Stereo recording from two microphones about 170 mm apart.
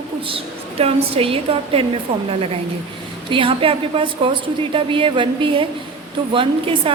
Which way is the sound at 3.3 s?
30° right (ahead or behind).